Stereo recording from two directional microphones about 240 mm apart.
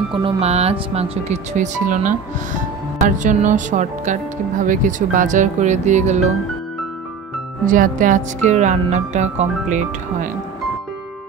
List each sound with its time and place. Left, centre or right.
0.1 s speech: right
7.6 s speech: right